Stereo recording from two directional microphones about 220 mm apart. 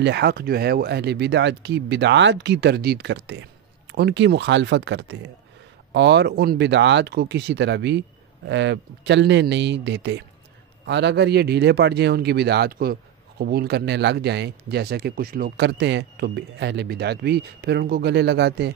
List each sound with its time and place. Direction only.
0.0 s speech: 50° right (ahead or behind)